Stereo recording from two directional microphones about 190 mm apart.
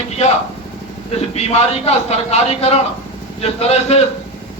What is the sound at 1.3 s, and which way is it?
A man's voice, 35° left (ahead or behind).